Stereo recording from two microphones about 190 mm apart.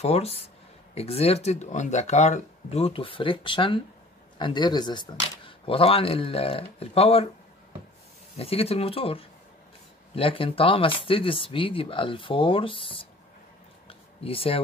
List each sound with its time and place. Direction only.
0.0 s speech: 30° left (ahead or behind)
8.4 s speech: 30° left (ahead or behind)
13.8 s a sound: 30° left (ahead or behind)